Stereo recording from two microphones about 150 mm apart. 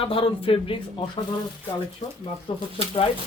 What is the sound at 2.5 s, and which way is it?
Speech, 35° left (ahead or behind).